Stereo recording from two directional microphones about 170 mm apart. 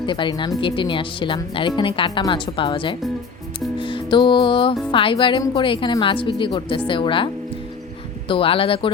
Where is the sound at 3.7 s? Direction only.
30° left (ahead or behind).